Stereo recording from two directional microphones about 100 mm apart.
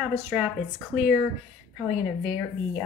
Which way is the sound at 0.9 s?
15° right (ahead or behind).